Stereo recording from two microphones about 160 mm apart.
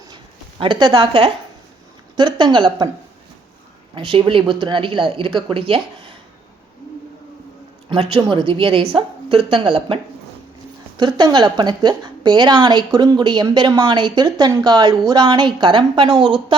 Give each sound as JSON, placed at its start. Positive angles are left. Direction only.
{"t": 0.6, "sound": "a woman's voice", "side_deg": -30}
{"t": 3.9, "sound": "speech", "side_deg": -30}
{"t": 7.9, "sound": "a woman's voice", "side_deg": -30}